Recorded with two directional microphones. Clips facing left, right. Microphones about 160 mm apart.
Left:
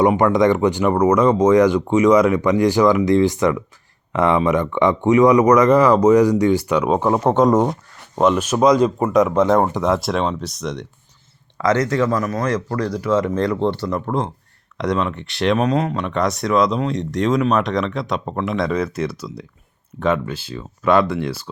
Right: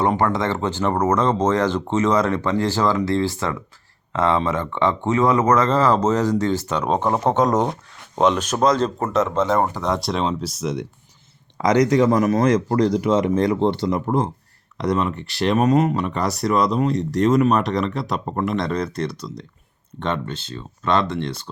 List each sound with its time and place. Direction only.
0.0 s speech: 15° left (ahead or behind); by 10.8 s 5° right (ahead or behind)
11.5 s speech: 15° right (ahead or behind)
14.8 s speech: 5° right (ahead or behind)